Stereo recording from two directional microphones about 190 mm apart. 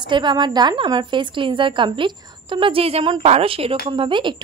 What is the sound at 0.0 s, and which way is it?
A woman's voice, 25° right (ahead or behind).